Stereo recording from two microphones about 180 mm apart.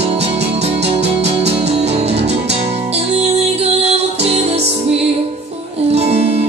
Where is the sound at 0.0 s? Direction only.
35° right (ahead or behind).